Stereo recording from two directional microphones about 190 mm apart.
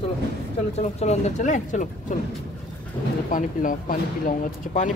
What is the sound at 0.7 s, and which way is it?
Speech, 35° left (ahead or behind).